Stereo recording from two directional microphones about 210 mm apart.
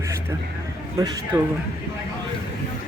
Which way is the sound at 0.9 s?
15° right (ahead or behind).